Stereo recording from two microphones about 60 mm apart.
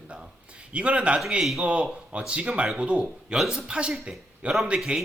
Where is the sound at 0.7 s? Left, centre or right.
Centre.